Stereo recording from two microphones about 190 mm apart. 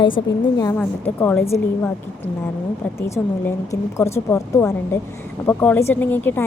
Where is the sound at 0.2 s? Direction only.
25° left (ahead or behind).